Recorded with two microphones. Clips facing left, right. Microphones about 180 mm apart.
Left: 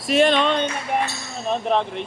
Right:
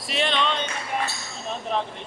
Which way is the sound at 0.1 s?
45° left (ahead or behind).